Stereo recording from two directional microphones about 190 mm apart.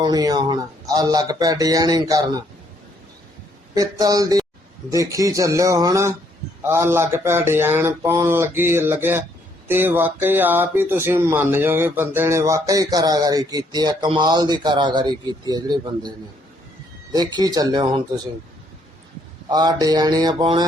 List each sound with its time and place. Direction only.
0.0 s speech: 20° right (ahead or behind)
3.8 s speech: 20° right (ahead or behind)
19.5 s speech: 20° right (ahead or behind)